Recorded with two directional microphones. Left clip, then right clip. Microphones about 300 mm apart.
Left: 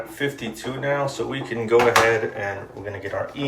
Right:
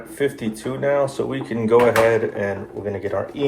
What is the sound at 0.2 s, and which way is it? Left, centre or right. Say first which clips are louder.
Speech: right 5 dB; centre.